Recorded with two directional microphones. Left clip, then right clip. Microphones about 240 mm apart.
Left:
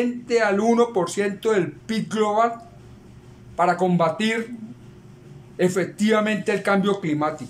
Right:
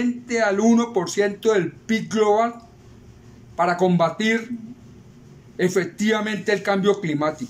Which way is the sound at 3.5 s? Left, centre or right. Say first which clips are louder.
Even; centre.